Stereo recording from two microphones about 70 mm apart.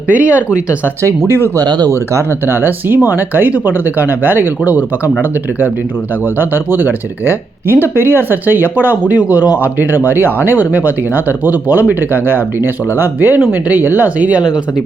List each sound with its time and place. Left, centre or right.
0.1 s speech: right
1.5 s speech: right
2.1 s speech: right
6.4 s speech: right